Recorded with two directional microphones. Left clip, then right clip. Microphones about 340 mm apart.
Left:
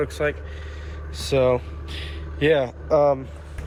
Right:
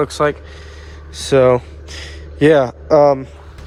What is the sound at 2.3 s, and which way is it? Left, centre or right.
Speech, right.